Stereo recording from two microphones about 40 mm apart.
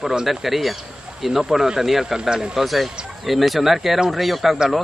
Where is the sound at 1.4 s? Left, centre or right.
Centre.